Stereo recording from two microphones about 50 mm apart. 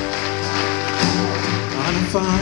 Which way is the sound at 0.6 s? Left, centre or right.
Centre.